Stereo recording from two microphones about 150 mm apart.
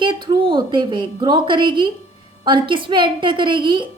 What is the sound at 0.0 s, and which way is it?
A woman's voice, 30° right (ahead or behind).